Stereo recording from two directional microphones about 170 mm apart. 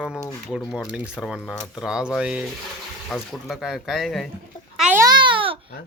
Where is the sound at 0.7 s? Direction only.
5° right (ahead or behind).